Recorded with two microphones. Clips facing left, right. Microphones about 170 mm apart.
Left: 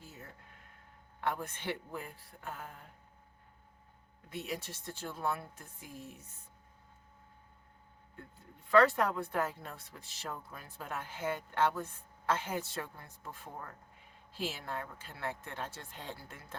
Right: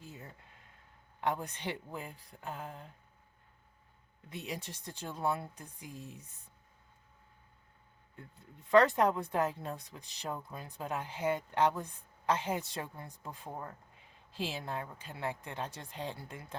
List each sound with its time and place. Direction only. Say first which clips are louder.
0.0 s a sound: right 2 dB; 15° right (ahead or behind)
1.2 s speech: right 2 dB; 15° right (ahead or behind)
4.3 s speech: left 1 dB; 20° right (ahead or behind)
8.7 s speech: right 1 dB; 20° right (ahead or behind)